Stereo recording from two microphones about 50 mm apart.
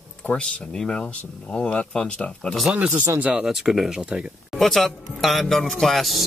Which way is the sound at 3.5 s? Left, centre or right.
Centre.